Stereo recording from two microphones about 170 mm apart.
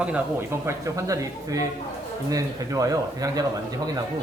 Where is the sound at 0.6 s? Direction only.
20° right (ahead or behind).